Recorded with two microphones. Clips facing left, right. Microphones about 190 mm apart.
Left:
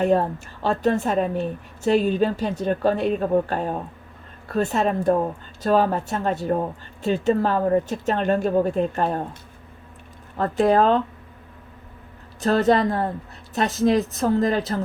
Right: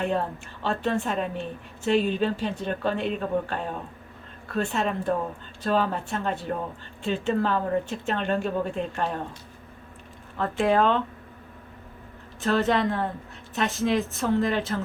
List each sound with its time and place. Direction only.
0.0 s a woman's voice: 40° left (ahead or behind)
10.3 s a woman's voice: 40° left (ahead or behind)
12.4 s a woman's voice: 40° left (ahead or behind)